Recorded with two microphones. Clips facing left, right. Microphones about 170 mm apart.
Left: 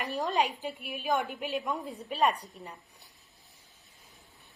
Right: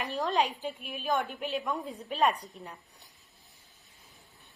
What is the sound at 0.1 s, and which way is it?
A woman's voice, 5° left (ahead or behind).